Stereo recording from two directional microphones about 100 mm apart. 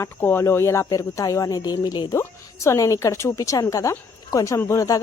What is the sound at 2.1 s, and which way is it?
A woman's voice, 30° left (ahead or behind).